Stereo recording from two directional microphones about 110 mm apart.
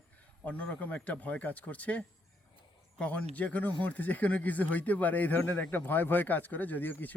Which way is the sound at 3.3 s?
15° left (ahead or behind).